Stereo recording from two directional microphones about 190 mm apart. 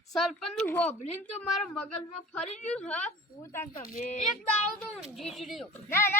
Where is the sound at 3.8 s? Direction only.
45° left (ahead or behind).